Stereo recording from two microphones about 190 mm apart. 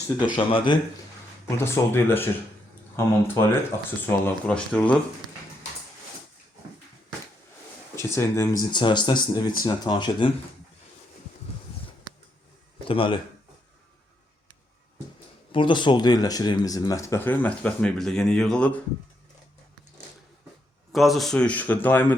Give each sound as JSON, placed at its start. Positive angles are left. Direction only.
{"t": 0.3, "sound": "speech", "side_deg": 25}
{"t": 1.5, "sound": "speech", "side_deg": 15}
{"t": 7.9, "sound": "speech", "side_deg": 15}
{"t": 12.9, "sound": "speech", "side_deg": 30}
{"t": 15.5, "sound": "speech", "side_deg": 25}
{"t": 20.9, "sound": "speech", "side_deg": 0}